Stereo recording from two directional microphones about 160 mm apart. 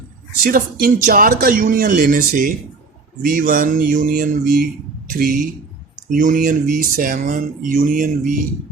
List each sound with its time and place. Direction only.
0.4 s speech: 65° right (ahead or behind)